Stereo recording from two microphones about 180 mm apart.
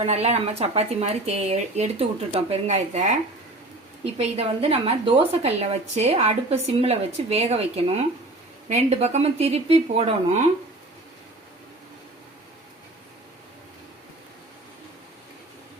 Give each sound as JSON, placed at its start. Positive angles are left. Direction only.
{"t": 0.0, "sound": "speech", "side_deg": -35}